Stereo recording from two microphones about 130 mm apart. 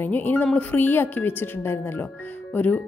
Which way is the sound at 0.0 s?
15° left (ahead or behind).